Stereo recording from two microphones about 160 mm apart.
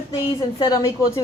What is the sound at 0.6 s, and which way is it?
Speech, 25° left (ahead or behind).